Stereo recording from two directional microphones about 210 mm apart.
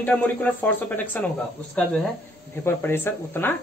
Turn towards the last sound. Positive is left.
turn(degrees=10)  # may be behind; listen again after turning